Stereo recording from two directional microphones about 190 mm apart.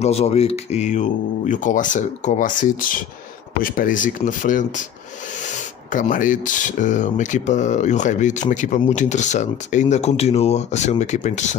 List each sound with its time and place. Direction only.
0.0 s speech: 35° left (ahead or behind)